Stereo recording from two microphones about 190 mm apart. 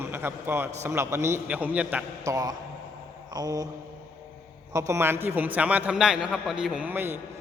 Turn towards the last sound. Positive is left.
turn(degrees=-10)  # may be behind; listen again after turning